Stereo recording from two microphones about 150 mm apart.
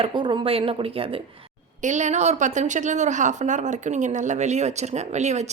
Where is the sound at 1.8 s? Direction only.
50° right (ahead or behind).